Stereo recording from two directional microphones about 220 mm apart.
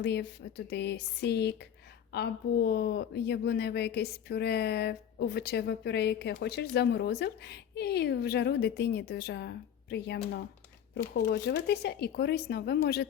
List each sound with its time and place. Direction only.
0.0 s a woman's voice: 50° left (ahead or behind)
10.9 s a woman's voice: 50° left (ahead or behind)